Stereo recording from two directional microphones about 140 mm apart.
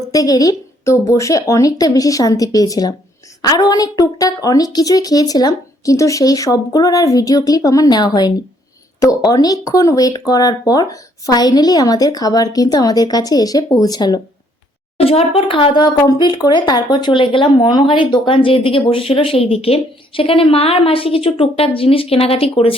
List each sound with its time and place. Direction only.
0.1 s speech: 25° left (ahead or behind)
14.9 s speech: 45° left (ahead or behind)